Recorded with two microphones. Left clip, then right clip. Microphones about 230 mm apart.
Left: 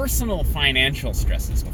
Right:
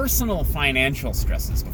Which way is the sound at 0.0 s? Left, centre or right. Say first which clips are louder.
Right 1 dB; right.